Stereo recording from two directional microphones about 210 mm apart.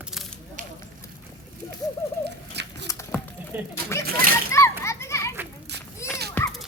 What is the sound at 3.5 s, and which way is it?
Speech, 10° right (ahead or behind).